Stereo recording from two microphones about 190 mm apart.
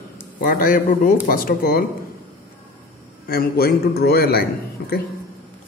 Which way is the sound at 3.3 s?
55° left (ahead or behind).